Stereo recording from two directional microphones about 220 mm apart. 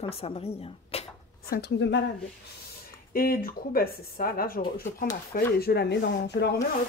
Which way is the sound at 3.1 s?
40° left (ahead or behind).